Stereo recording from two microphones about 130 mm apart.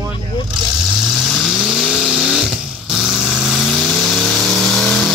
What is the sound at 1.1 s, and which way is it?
Vehicle, centre (ahead or behind).